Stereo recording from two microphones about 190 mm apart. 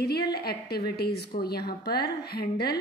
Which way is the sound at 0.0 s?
55° left (ahead or behind).